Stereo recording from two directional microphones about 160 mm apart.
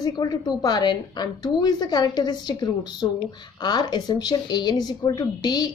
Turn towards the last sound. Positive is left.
turn(degrees=25)  # may be behind; listen again after turning